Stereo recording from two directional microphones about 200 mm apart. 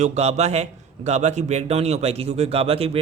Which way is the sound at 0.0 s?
30° right (ahead or behind).